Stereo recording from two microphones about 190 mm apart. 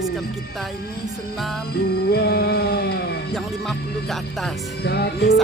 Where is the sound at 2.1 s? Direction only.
55° left (ahead or behind).